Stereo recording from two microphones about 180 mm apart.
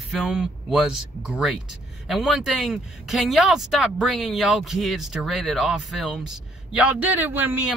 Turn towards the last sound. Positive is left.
turn(degrees=-10)  # may be behind; listen again after turning